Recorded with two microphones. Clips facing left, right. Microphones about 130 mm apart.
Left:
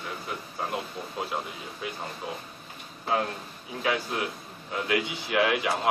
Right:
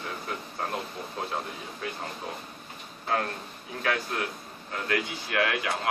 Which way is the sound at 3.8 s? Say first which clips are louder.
Left 1 dB; 15° left (ahead or behind).